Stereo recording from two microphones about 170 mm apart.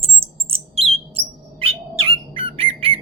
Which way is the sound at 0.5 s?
35° right (ahead or behind).